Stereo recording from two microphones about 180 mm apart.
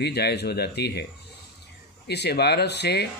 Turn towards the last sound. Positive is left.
turn(degrees=65)  # may be behind; listen again after turning